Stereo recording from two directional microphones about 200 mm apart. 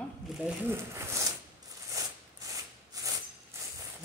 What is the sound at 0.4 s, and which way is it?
Speech, 10° right (ahead or behind).